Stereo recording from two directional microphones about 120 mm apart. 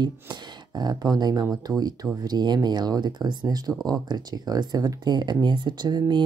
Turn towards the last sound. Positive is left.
turn(degrees=-40)  # may be behind; listen again after turning